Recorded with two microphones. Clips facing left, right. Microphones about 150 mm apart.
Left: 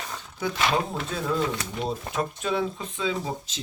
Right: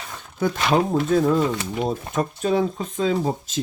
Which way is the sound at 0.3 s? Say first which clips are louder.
Right 6 dB; 50° right (ahead or behind).